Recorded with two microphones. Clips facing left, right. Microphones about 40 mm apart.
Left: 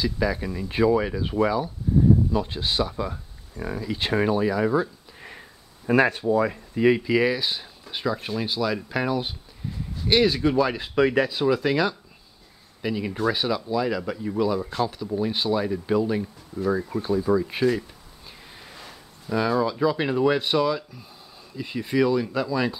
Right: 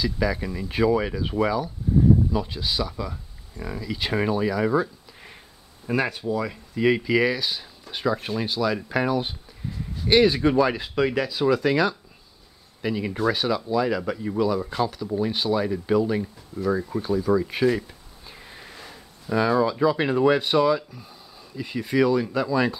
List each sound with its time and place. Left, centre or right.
0.0 s speech: centre
1.9 s a sound: centre
2.4 s speech: left
3.5 s speech: centre
4.1 s speech: centre
5.9 s speech: left
6.5 s speech: centre
8.0 s speech: centre
10.8 s speech: centre
11.1 s speech: left
11.4 s speech: centre